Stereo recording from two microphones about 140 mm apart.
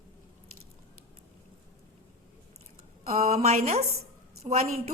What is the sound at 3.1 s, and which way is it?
A woman's voice, 50° right (ahead or behind).